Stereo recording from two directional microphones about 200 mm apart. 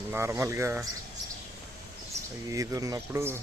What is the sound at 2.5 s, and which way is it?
Speech, 15° right (ahead or behind).